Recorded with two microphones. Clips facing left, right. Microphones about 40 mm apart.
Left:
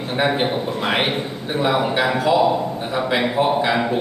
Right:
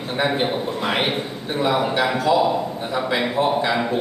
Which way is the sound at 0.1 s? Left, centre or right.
Centre.